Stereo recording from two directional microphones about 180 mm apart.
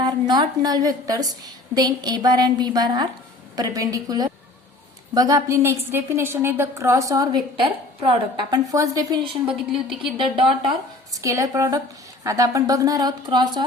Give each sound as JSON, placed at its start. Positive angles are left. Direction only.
{"t": 0.0, "sound": "a woman's voice", "side_deg": -25}